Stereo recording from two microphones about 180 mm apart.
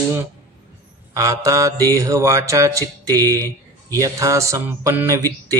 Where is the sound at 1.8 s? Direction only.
20° right (ahead or behind).